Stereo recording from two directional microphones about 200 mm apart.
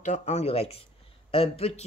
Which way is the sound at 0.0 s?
35° left (ahead or behind).